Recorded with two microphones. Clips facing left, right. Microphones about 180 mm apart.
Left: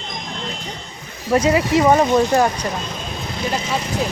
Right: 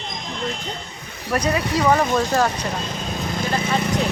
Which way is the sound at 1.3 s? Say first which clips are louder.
Left 6 dB; 25° left (ahead or behind).